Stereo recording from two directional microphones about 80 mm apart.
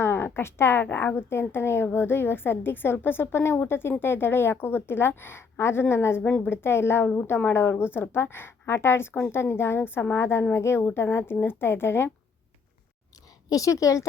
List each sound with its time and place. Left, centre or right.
0.0 s a woman's voice: left
13.5 s speech: left